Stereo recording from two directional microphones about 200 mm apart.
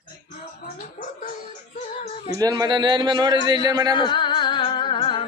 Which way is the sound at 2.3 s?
20° right (ahead or behind).